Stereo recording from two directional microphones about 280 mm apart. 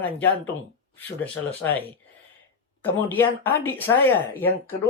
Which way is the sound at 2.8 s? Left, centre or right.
Centre.